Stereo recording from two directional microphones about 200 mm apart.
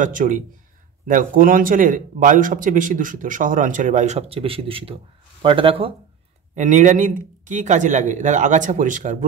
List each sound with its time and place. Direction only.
0.0 s a man's voice: 40° right (ahead or behind)
6.5 s a man's voice: 40° right (ahead or behind)